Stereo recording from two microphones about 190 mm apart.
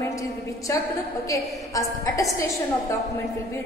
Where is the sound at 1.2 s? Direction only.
15° left (ahead or behind).